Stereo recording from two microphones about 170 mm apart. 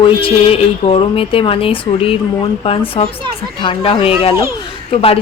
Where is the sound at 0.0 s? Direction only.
30° left (ahead or behind).